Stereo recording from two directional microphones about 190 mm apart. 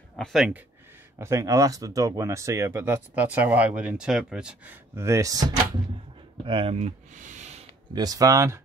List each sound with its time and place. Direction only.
0.1 s speech: centre (ahead or behind)
1.1 s speech: 15° right (ahead or behind); by 7.6 s 40° right (ahead or behind)
7.9 s speech: 20° right (ahead or behind)